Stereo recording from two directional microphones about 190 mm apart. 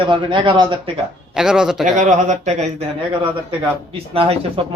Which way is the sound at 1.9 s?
40° right (ahead or behind).